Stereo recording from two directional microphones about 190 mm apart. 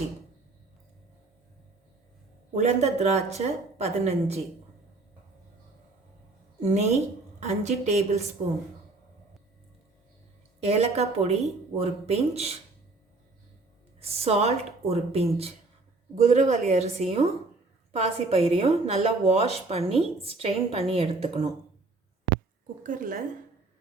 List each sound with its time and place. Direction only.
2.6 s a woman's voice: 35° right (ahead or behind)
6.6 s a woman's voice: 40° right (ahead or behind)
10.6 s a woman's voice: 35° right (ahead or behind)
14.0 s a woman's voice: 30° right (ahead or behind)
22.8 s a woman's voice: 45° right (ahead or behind)